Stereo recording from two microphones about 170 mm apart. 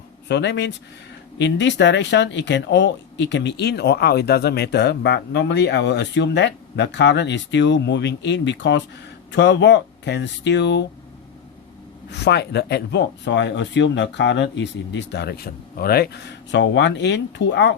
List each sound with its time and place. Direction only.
0.3 s speech: 90° left
12.1 s speech: 85° left